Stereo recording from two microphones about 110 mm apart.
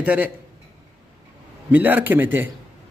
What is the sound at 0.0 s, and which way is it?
Speech, 15° right (ahead or behind).